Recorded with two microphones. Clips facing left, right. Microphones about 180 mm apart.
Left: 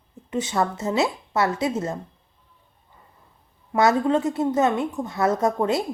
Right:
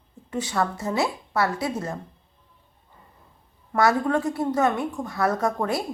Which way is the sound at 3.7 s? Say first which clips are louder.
Left 2 dB; 20° left (ahead or behind).